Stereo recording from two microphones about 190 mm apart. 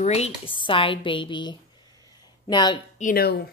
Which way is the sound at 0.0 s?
35° left (ahead or behind).